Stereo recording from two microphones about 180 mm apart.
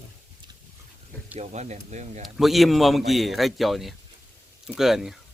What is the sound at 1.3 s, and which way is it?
Speech, 40° right (ahead or behind).